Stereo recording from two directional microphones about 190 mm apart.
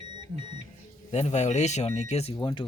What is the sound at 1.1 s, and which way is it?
Speech, 35° left (ahead or behind).